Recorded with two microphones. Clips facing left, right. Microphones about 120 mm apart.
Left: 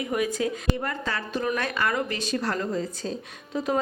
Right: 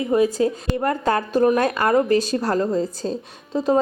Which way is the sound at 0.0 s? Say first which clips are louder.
Right 8 dB; 30° right (ahead or behind).